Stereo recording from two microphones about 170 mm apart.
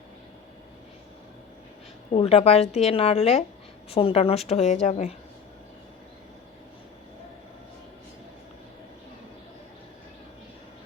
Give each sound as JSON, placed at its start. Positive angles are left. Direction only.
{"t": 2.1, "sound": "a woman's voice", "side_deg": 35}